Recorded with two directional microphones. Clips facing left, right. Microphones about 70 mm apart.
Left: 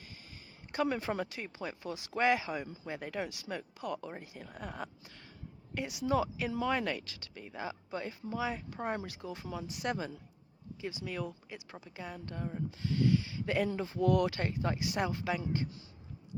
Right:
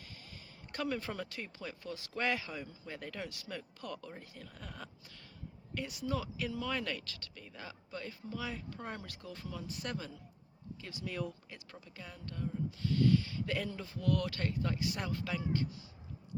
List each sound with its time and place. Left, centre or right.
0.9 s speech: centre
11.1 s speech: centre; by 15.6 s left